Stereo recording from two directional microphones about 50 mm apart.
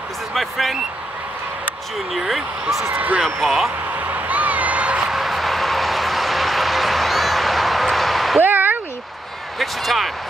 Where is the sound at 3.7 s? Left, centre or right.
Right.